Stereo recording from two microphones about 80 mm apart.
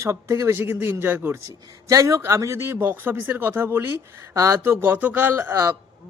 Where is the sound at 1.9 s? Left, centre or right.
Right.